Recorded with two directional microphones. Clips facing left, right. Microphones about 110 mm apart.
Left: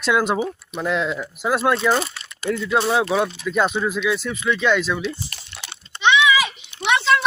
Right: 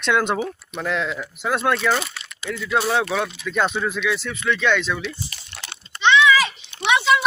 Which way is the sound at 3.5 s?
10° left (ahead or behind).